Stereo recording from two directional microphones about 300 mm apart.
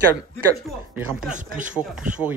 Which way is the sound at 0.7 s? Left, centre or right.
Centre.